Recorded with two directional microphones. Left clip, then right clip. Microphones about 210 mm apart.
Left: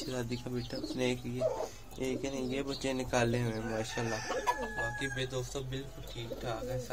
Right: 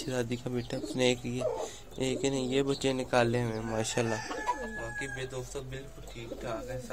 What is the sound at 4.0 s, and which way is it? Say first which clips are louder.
Speech: right 9 dB; 50° right (ahead or behind).